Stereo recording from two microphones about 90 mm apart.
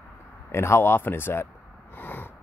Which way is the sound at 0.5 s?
30° left (ahead or behind).